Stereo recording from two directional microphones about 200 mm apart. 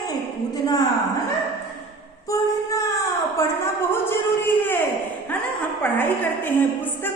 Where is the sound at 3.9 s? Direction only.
10° left (ahead or behind).